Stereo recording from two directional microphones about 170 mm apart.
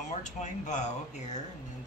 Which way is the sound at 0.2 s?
45° left (ahead or behind).